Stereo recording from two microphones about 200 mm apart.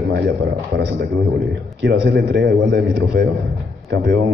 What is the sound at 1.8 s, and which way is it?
A man's voice, 60° right (ahead or behind).